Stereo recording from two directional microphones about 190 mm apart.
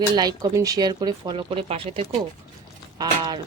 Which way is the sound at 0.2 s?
20° right (ahead or behind).